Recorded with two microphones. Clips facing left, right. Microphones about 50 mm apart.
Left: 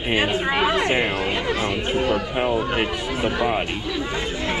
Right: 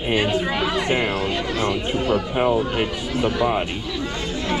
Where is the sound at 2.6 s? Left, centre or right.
Left.